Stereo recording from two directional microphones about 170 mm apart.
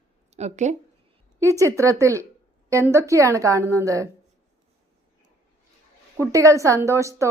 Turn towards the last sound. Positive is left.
turn(degrees=-20)  # may be behind; listen again after turning